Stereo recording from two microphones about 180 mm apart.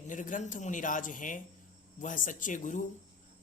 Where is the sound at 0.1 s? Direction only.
45° left (ahead or behind).